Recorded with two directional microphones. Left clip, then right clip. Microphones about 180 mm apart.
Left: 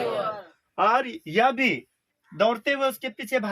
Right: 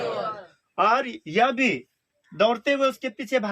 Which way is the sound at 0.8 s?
30° right (ahead or behind).